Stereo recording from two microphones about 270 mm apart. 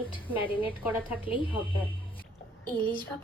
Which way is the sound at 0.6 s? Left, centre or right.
Centre.